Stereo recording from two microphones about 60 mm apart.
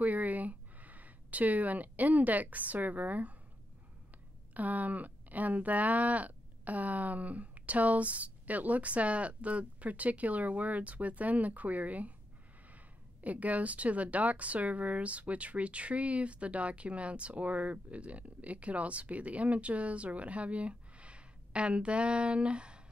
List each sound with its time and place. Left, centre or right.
0.0 s speech: right
4.6 s speech: right